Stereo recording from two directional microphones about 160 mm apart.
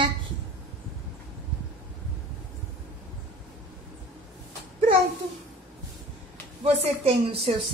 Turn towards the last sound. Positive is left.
turn(degrees=-35)  # may be behind; listen again after turning